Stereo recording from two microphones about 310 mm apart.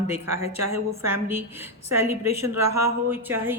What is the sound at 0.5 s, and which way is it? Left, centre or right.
Speech, right.